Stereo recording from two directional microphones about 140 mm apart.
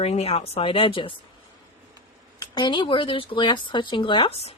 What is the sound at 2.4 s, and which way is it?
A woman's voice, 35° left (ahead or behind).